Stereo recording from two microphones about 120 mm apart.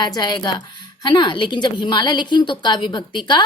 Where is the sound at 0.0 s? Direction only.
35° left (ahead or behind).